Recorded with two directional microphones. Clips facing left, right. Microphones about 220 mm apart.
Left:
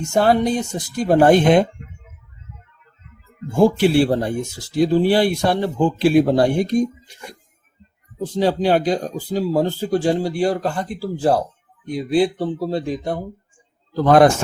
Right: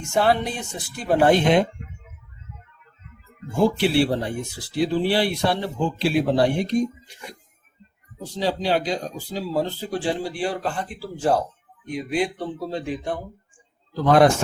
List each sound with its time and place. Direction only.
0.1 s a woman's voice: 40° left (ahead or behind)
3.6 s speech: 45° left (ahead or behind)
8.4 s a woman's voice: 50° left (ahead or behind)
14.0 s speech: 50° left (ahead or behind)